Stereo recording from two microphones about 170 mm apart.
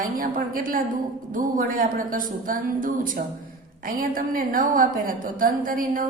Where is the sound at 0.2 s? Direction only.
55° right (ahead or behind).